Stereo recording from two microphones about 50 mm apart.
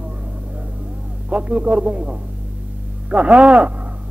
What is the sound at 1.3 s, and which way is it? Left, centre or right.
A man's voice, right.